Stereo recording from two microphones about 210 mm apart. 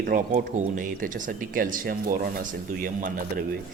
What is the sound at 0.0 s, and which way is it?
A man's voice, 40° right (ahead or behind).